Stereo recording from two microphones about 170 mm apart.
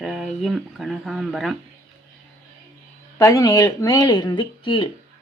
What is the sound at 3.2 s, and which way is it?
Speech, 20° left (ahead or behind).